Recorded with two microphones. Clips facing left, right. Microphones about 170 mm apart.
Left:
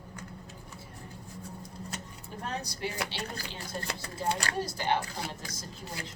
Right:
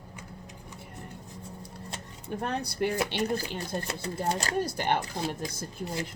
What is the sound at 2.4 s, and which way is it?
Speech, 60° right (ahead or behind).